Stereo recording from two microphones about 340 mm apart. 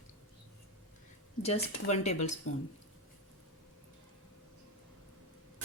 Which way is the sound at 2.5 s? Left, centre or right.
Left.